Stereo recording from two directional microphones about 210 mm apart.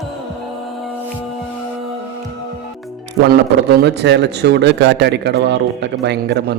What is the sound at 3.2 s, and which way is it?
Speech, 50° right (ahead or behind).